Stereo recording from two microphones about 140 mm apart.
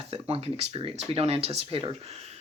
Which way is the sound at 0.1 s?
45° right (ahead or behind).